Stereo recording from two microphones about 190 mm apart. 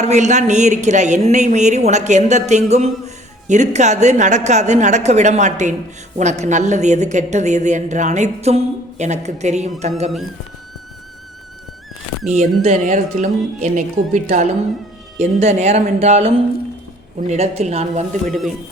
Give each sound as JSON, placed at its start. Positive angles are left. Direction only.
{"t": 0.0, "sound": "a woman's voice", "side_deg": -40}
{"t": 12.3, "sound": "a woman's voice", "side_deg": -35}
{"t": 18.3, "sound": "speech", "side_deg": 0}